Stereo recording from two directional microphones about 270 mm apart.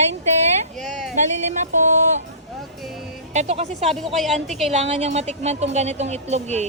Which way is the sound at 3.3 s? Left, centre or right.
Right.